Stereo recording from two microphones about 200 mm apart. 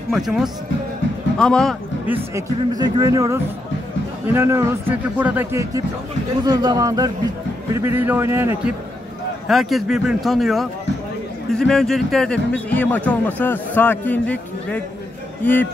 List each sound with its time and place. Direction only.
0.1 s a man's voice: centre (ahead or behind)
2.3 s speech: 20° right (ahead or behind)
9.5 s a man's voice: centre (ahead or behind)